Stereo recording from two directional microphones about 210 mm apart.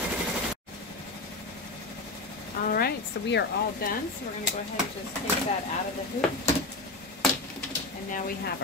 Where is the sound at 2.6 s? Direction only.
45° left (ahead or behind).